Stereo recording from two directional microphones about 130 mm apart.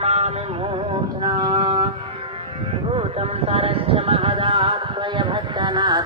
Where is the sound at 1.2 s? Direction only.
35° right (ahead or behind).